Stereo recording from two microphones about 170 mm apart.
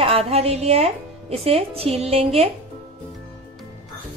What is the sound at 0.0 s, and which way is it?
A woman's voice, 35° right (ahead or behind).